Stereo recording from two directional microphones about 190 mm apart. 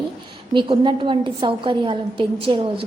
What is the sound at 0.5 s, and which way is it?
A woman's voice, 25° right (ahead or behind).